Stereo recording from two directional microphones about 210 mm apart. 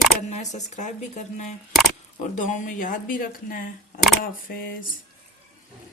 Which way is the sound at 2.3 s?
35° left (ahead or behind).